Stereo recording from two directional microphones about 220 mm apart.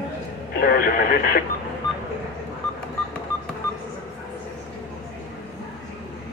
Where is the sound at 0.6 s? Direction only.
40° left (ahead or behind).